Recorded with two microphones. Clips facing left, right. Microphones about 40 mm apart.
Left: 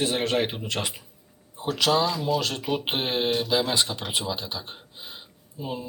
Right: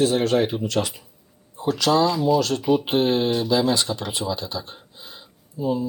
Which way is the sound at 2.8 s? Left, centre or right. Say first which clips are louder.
Right 6 dB; left.